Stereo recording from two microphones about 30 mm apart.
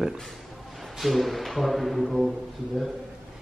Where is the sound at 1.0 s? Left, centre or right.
Centre.